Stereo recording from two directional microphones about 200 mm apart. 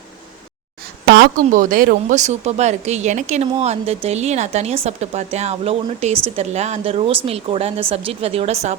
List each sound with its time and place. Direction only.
1.0 s a woman's voice: 55° right (ahead or behind); by 8.7 s 30° right (ahead or behind)